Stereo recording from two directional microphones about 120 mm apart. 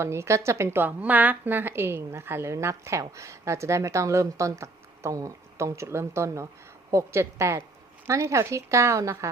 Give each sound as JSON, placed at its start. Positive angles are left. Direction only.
{"t": 0.0, "sound": "a woman's voice", "side_deg": -20}